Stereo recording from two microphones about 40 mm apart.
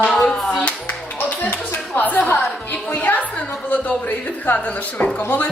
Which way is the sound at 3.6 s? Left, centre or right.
Left.